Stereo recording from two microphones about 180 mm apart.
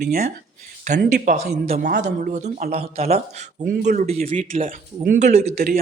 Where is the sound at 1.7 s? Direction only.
60° right (ahead or behind).